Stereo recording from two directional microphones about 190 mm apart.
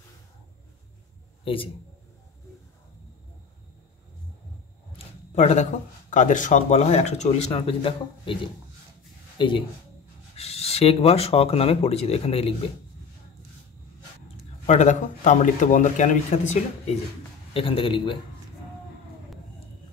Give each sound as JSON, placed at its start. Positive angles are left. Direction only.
{"t": 1.4, "sound": "speech", "side_deg": 30}
{"t": 4.9, "sound": "a man's voice", "side_deg": 35}
{"t": 14.7, "sound": "speech", "side_deg": 40}
{"t": 17.6, "sound": "a man's voice", "side_deg": 30}